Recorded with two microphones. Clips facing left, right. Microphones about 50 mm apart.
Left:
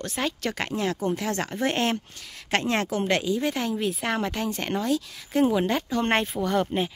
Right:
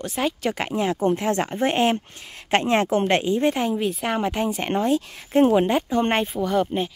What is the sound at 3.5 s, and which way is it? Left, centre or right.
Speech, centre.